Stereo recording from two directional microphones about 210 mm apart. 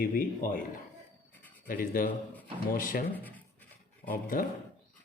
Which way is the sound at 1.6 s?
45° left (ahead or behind).